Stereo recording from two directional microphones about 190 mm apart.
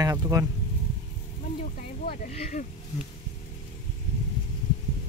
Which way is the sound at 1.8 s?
45° left (ahead or behind).